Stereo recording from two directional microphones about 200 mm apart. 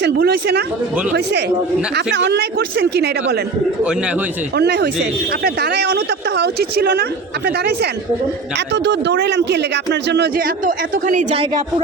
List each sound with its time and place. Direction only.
0.0 s speech: 55° right (ahead or behind)
4.5 s speech: 55° right (ahead or behind); by 11.4 s 35° right (ahead or behind)